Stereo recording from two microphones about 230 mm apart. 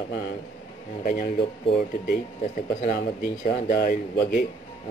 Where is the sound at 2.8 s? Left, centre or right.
Left.